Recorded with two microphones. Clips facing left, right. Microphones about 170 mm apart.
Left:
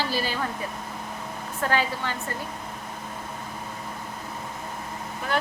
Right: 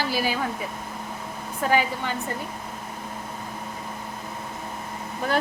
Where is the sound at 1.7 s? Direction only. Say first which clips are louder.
Right 3 dB; 15° right (ahead or behind).